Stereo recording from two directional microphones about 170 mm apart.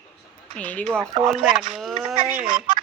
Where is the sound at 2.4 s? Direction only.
50° right (ahead or behind).